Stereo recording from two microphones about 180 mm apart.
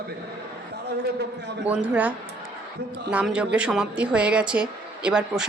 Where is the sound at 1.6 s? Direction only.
5° right (ahead or behind).